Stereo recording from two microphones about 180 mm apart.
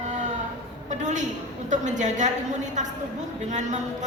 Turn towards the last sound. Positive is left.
turn(degrees=-40)  # may be behind; listen again after turning